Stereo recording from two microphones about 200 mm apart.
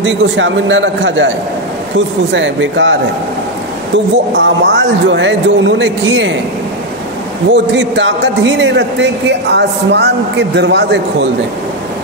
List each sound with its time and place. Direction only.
0.0 s a man's voice: 70° right (ahead or behind)
4.4 s a man's voice: 60° right (ahead or behind)
7.5 s a man's voice: 65° right (ahead or behind)